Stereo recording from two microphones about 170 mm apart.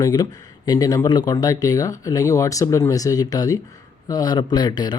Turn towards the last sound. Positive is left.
turn(degrees=25)  # may be behind; listen again after turning